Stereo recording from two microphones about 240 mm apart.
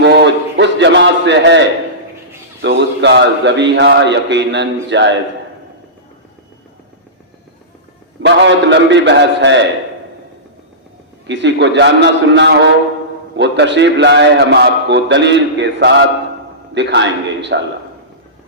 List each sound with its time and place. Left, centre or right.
0.0 s a sound: right
2.6 s a man's voice: right
8.2 s a man's voice: right
11.3 s a man's voice: right